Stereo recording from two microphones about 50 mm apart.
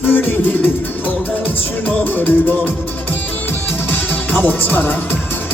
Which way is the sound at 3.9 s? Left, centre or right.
Left.